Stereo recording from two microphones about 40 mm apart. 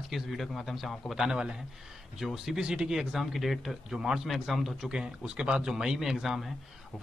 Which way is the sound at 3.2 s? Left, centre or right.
Centre.